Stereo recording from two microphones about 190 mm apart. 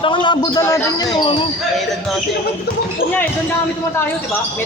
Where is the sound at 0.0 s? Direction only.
25° left (ahead or behind).